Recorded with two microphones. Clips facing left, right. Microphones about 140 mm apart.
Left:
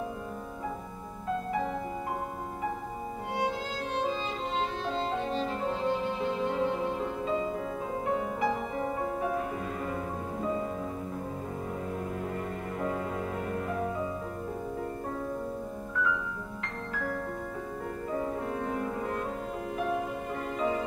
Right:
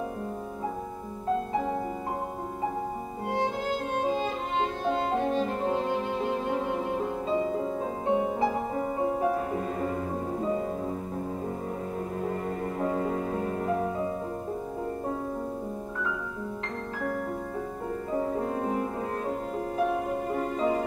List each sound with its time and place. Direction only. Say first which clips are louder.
3.9 s music: right 2 dB; 50° right (ahead or behind)
7.6 s music: right 3 dB; 25° right (ahead or behind)
12.8 s music: right 4 dB; 35° right (ahead or behind)
18.4 s music: right 4 dB; 40° right (ahead or behind)
20.3 s music: right 3 dB; 35° right (ahead or behind)